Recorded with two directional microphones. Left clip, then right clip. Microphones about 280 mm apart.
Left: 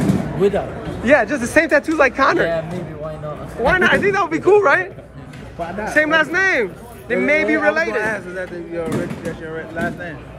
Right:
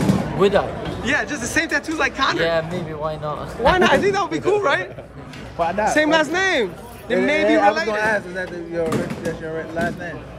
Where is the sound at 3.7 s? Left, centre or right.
Centre.